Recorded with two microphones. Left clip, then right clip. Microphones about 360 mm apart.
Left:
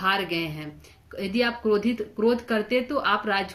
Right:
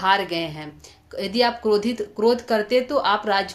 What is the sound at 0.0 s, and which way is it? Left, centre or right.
Speech, centre.